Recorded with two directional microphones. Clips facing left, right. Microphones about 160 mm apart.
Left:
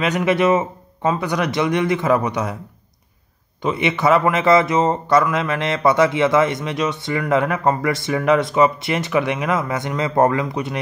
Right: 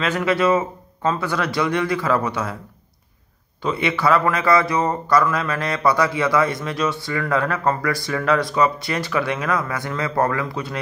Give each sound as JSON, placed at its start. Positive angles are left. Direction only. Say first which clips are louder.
{"t": 0.0, "sound": "a man's voice", "louder": "left 2 dB", "side_deg": 20}
{"t": 3.6, "sound": "a man's voice", "louder": "left 2 dB", "side_deg": 20}